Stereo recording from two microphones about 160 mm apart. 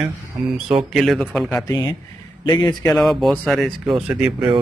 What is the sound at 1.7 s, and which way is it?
A man's voice, 25° left (ahead or behind).